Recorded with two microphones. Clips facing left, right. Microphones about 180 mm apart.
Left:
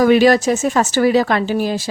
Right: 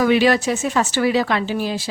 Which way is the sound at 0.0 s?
40° left (ahead or behind).